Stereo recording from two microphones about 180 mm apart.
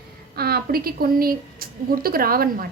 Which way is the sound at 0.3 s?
60° right (ahead or behind).